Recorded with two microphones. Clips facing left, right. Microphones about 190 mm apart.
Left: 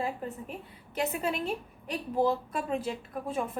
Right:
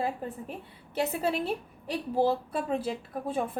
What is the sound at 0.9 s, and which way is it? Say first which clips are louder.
A woman's voice: right 2 dB; 35° right (ahead or behind).